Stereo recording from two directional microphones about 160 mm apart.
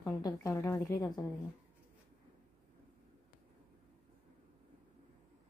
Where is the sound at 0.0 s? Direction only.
20° left (ahead or behind).